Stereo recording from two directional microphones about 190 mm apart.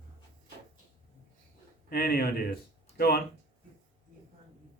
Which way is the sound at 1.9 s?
55° left (ahead or behind).